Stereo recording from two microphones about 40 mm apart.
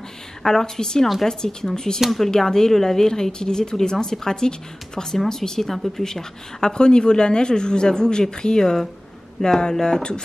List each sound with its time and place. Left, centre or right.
0.4 s speech: centre
2.0 s speech: centre